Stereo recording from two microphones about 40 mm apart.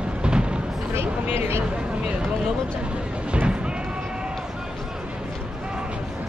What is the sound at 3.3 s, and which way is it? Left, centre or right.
Music, right.